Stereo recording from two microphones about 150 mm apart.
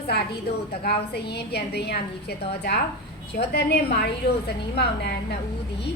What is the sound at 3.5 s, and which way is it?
Female singing, 90° left.